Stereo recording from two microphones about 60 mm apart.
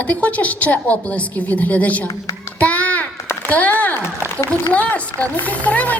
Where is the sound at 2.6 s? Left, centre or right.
Left.